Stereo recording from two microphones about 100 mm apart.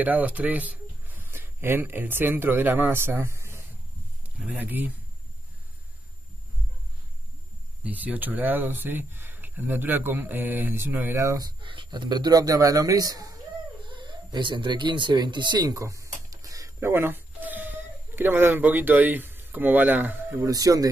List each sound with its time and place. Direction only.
0.0 s speech: 15° right (ahead or behind)
7.8 s speech: 15° right (ahead or behind)
11.4 s speech: 50° right (ahead or behind)
13.8 s speech: 50° right (ahead or behind); by 20.4 s 20° right (ahead or behind)
20.4 s speech: 35° right (ahead or behind)